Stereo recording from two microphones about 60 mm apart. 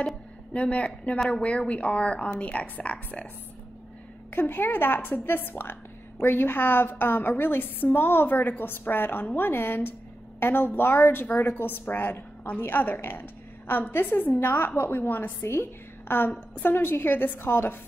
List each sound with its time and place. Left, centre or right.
0.0 s speech: left
4.3 s a woman's voice: left
15.4 s a woman's voice: left
16.1 s a woman's voice: left